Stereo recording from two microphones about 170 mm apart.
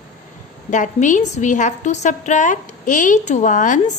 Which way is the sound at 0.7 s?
45° left (ahead or behind).